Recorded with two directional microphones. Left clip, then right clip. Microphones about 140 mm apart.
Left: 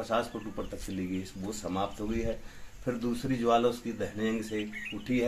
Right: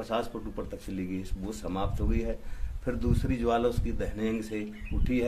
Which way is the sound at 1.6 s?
Centre (ahead or behind).